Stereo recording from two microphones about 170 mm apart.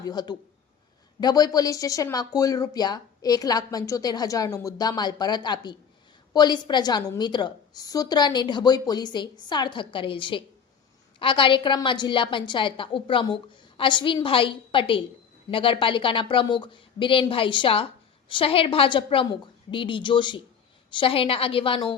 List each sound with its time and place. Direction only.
0.0 s a woman's voice: 25° left (ahead or behind)